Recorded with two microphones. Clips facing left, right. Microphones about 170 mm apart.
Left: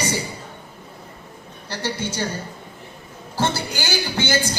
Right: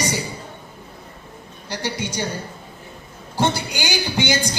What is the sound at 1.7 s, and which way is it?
Speech, 15° right (ahead or behind).